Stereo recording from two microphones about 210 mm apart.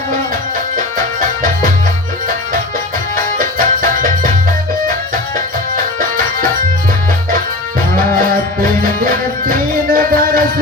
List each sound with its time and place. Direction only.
3.3 s music: 40° right (ahead or behind)
9.5 s music: 45° right (ahead or behind)